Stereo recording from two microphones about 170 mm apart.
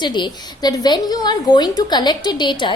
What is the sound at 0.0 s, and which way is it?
A woman's voice, 25° left (ahead or behind).